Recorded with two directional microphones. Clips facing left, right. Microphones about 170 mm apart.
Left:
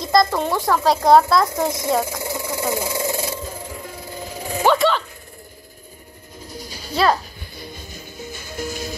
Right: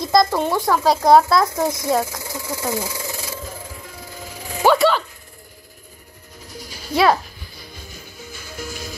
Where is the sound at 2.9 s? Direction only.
25° left (ahead or behind).